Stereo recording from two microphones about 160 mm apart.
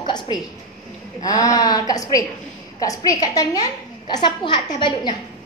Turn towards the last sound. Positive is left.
turn(degrees=30)  # may be behind; listen again after turning